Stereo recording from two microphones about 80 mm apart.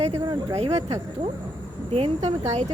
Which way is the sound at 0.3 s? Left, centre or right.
Right.